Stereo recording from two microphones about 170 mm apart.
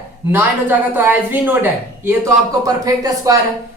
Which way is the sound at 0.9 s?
10° right (ahead or behind).